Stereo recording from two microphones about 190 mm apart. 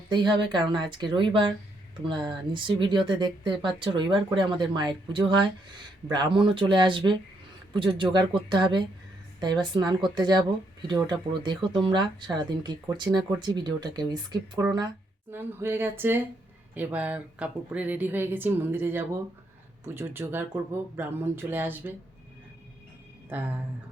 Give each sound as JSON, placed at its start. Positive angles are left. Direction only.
{"t": 0.1, "sound": "speech", "side_deg": -25}
{"t": 15.3, "sound": "speech", "side_deg": -10}